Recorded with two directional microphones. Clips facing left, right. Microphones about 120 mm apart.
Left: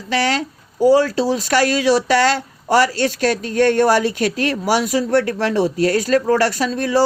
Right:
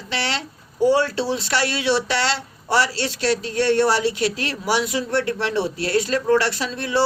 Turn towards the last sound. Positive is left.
turn(degrees=40)  # may be behind; listen again after turning